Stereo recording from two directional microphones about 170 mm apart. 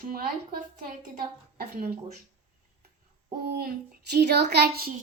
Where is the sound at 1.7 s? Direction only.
65° right (ahead or behind).